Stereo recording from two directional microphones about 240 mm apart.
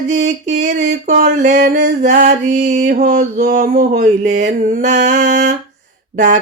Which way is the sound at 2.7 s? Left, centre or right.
Right.